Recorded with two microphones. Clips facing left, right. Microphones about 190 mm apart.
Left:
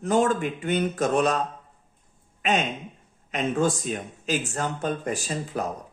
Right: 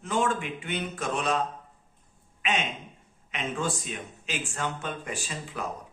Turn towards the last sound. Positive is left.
turn(degrees=40)  # may be behind; listen again after turning